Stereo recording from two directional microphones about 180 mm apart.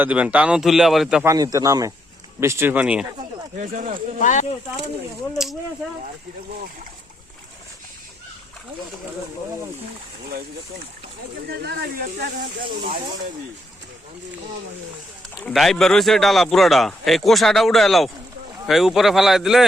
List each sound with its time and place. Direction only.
0.0 s a man's voice: 5° right (ahead or behind)
1.2 s speech: 20° right (ahead or behind)
3.5 s speech: 45° right (ahead or behind)
4.2 s speech: 45° left (ahead or behind)
11.4 s speech: 65° right (ahead or behind)
15.4 s a man's voice: centre (ahead or behind)